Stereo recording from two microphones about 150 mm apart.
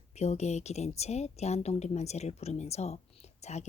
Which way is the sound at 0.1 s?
45° left (ahead or behind).